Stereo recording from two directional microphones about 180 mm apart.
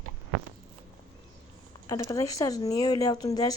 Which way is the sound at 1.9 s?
15° left (ahead or behind).